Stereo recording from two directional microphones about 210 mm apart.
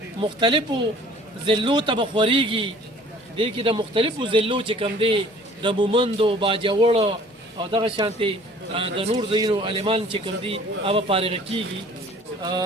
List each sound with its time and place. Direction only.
0.2 s speech: 20° right (ahead or behind)